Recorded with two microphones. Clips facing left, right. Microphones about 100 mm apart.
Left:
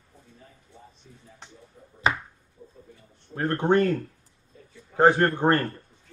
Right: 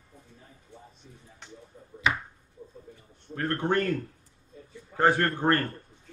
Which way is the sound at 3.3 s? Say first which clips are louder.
Left 5 dB; 20° left (ahead or behind).